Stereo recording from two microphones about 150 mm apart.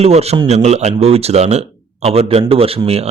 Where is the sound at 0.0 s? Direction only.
45° right (ahead or behind).